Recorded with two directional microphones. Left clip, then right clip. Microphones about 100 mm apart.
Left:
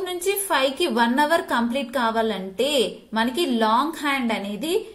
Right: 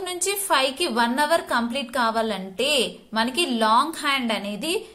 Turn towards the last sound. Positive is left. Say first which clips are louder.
# even
turn(degrees=-20)  # may be behind; listen again after turning